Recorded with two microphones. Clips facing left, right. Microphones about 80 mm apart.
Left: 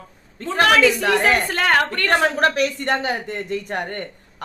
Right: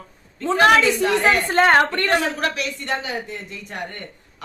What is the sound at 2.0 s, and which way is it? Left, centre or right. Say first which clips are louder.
Speech: left 3 dB; left.